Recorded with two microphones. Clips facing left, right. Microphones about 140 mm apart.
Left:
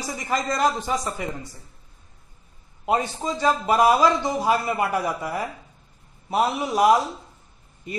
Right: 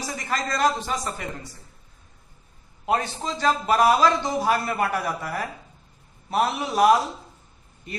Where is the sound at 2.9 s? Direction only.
10° left (ahead or behind).